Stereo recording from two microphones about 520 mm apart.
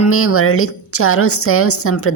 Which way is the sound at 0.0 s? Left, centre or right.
Left.